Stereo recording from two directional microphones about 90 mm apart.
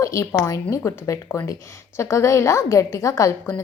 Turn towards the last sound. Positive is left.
turn(degrees=35)  # may be behind; listen again after turning